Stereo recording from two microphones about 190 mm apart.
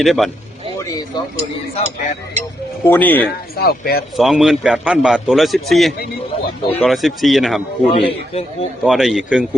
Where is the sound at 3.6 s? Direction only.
55° left (ahead or behind).